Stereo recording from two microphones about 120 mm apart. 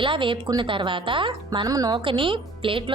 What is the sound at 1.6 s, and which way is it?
Speech, 30° right (ahead or behind).